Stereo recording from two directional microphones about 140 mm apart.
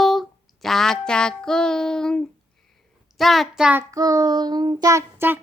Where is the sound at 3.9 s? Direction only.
25° right (ahead or behind).